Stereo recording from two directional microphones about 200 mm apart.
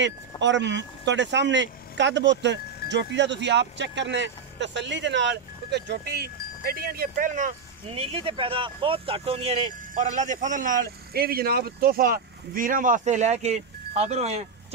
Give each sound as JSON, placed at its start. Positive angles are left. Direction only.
{"t": 0.4, "sound": "speech", "side_deg": -65}